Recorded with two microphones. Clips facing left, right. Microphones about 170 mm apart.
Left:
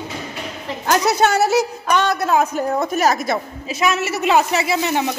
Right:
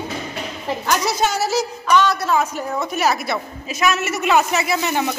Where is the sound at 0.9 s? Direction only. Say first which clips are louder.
Left 5 dB; 60° left (ahead or behind); by 3.4 s 45° left (ahead or behind).